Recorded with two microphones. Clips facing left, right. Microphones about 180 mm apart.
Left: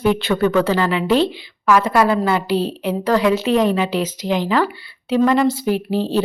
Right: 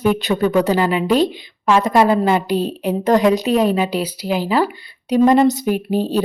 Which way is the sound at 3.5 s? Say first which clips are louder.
Even; 10° right (ahead or behind).